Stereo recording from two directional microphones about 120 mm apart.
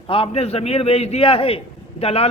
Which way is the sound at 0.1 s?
55° left (ahead or behind).